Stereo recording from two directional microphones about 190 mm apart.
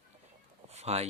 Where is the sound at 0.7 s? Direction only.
35° right (ahead or behind).